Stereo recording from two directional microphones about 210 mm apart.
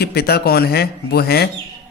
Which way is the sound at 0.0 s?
50° left (ahead or behind).